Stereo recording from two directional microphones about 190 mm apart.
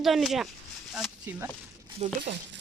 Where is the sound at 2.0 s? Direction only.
35° right (ahead or behind).